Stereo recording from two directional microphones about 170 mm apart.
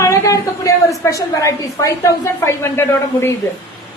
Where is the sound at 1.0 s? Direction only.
20° left (ahead or behind).